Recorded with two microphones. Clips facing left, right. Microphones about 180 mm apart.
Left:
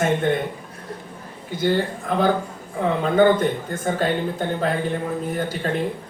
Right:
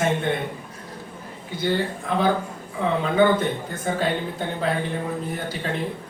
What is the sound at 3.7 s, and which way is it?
Speech, 50° left (ahead or behind).